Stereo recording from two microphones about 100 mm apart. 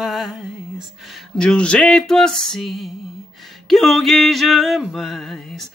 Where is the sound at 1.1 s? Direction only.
10° left (ahead or behind).